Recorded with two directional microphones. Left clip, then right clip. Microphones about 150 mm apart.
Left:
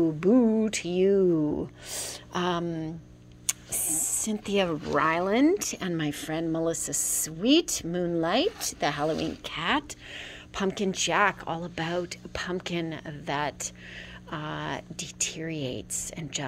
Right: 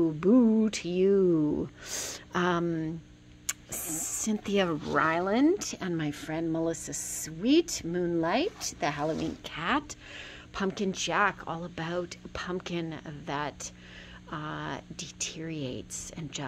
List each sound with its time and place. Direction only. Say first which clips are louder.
0.0 s speech: left 2 dB; 10° right (ahead or behind); by 4.7 s 25° right (ahead or behind)
4.9 s speech: left 2 dB; 15° right (ahead or behind)